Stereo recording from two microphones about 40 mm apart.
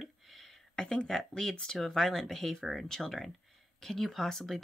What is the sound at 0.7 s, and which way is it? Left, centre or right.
Speech, centre.